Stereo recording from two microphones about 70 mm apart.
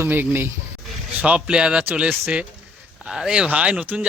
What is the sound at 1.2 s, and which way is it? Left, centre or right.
Speech, centre.